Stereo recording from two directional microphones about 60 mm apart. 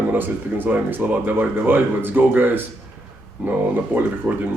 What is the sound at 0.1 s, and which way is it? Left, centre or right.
Speech, right.